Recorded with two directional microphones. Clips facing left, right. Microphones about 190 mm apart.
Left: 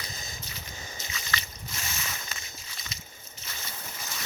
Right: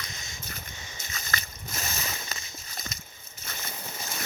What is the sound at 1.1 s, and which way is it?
Boat, 45° right (ahead or behind).